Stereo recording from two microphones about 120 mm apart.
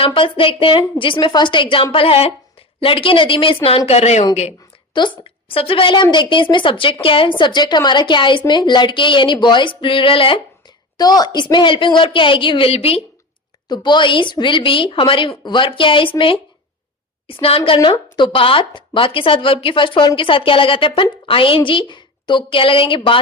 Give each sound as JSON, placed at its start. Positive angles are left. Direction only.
{"t": 0.0, "sound": "a woman's voice", "side_deg": 45}
{"t": 4.9, "sound": "a woman's voice", "side_deg": 45}
{"t": 10.9, "sound": "a woman's voice", "side_deg": 35}
{"t": 13.7, "sound": "a woman's voice", "side_deg": 40}